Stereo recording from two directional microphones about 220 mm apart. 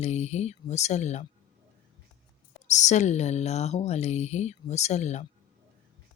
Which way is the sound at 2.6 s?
30° left (ahead or behind).